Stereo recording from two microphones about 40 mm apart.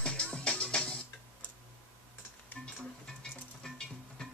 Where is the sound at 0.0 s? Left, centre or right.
Left.